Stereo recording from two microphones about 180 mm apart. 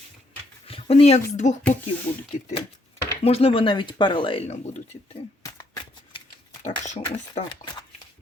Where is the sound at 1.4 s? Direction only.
40° left (ahead or behind).